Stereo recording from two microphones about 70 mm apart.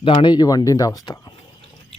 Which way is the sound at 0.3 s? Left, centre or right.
Left.